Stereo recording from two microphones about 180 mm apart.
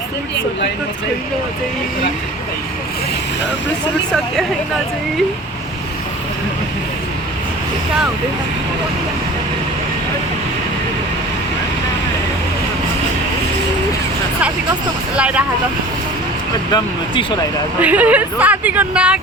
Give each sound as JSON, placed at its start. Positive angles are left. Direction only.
{"t": 15.1, "sound": "speech", "side_deg": -5}
{"t": 16.7, "sound": "speech", "side_deg": 25}
{"t": 17.7, "sound": "speech", "side_deg": -10}